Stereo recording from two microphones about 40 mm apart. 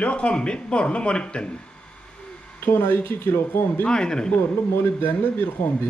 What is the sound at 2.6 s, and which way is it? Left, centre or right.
Speech, left.